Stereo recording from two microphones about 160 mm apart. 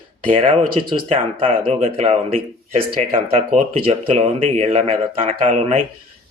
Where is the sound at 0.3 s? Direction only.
35° right (ahead or behind).